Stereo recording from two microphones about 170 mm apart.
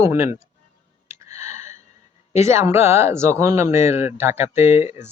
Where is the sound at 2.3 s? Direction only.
15° right (ahead or behind).